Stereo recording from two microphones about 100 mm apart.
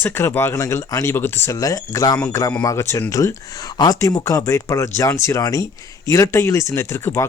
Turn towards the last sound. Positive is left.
turn(degrees=25)  # may be behind; listen again after turning